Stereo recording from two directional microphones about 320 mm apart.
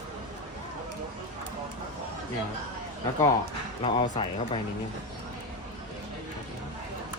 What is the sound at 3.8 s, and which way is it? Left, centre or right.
Speech, centre.